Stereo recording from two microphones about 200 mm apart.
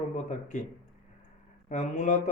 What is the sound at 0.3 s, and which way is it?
Speech, 40° left (ahead or behind).